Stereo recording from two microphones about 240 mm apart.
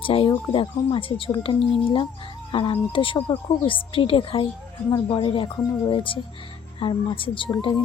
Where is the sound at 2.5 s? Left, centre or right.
Centre.